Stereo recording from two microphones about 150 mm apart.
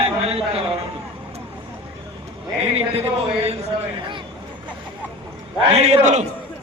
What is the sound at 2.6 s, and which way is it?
Speech, 40° right (ahead or behind).